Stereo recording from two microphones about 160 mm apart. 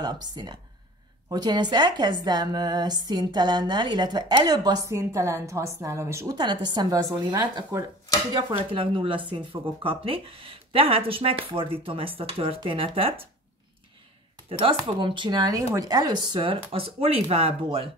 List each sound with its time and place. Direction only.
0.0 s speech: 25° right (ahead or behind)
14.6 s speech: 35° right (ahead or behind)